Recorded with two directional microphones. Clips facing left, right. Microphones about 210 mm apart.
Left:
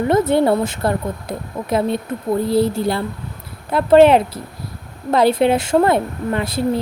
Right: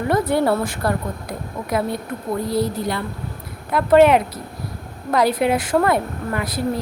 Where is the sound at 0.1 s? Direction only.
25° left (ahead or behind).